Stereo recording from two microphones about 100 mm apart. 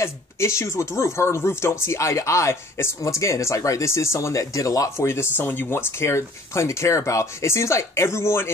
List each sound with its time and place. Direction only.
0.0 s speech: 30° left (ahead or behind)